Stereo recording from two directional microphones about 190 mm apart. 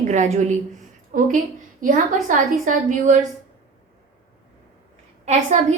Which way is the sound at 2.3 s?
45° right (ahead or behind).